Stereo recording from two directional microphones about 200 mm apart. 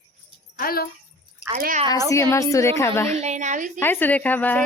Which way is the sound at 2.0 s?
15° left (ahead or behind).